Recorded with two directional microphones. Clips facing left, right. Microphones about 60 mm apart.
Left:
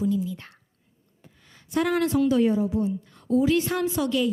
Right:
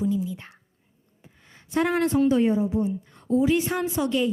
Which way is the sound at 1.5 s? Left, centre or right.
Right.